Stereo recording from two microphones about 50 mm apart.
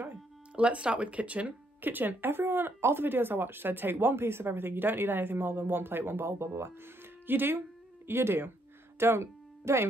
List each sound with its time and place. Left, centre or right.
0.1 s speech: right
1.8 s speech: right
7.2 s speech: right
8.1 s speech: right